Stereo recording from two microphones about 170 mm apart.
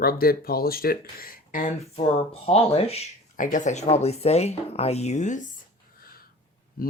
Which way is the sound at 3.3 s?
50° left (ahead or behind).